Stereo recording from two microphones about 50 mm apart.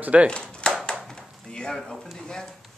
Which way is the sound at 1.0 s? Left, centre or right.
Centre.